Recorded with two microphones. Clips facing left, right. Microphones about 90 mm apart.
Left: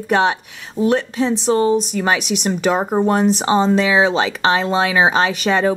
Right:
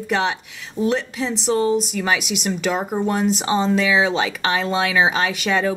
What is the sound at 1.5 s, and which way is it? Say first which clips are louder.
Speech: left 1 dB; 35° left (ahead or behind).